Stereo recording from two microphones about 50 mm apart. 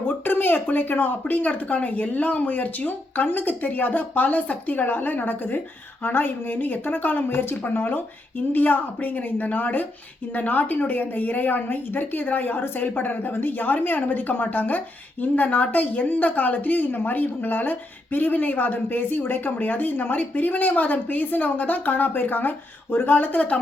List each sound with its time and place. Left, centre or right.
0.1 s a woman's voice: left